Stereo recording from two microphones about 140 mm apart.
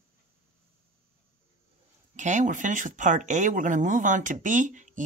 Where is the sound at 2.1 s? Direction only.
60° right (ahead or behind).